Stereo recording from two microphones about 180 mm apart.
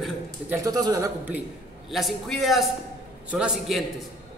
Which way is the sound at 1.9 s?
Centre (ahead or behind).